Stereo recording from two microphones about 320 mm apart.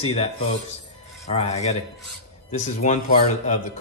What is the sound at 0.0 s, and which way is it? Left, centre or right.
A man's voice, centre.